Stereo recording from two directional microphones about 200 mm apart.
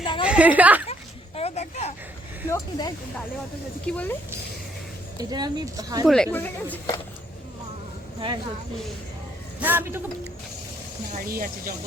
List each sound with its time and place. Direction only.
0.0 s a sound: 25° left (ahead or behind)
0.3 s a woman's voice: 5° right (ahead or behind)
1.4 s a sound: 30° left (ahead or behind)
2.5 s speech: 20° left (ahead or behind)
3.8 s speech: 5° left (ahead or behind)
5.1 s speech: 20° right (ahead or behind)
6.1 s speech: 5° left (ahead or behind)
8.2 s speech: 25° right (ahead or behind)
9.6 s a man's voice: 10° right (ahead or behind)
11.1 s speech: 45° right (ahead or behind)